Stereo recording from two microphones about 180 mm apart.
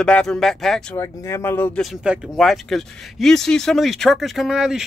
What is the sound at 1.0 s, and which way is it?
Speech, 15° left (ahead or behind).